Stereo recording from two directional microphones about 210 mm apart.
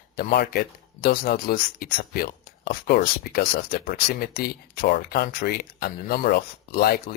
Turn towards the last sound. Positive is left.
turn(degrees=45)  # may be behind; listen again after turning